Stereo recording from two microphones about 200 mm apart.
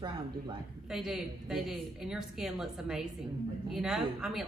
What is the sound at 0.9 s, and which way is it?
A woman's voice, centre (ahead or behind).